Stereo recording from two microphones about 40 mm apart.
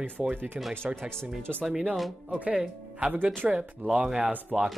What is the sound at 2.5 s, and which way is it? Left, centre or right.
Speech, right.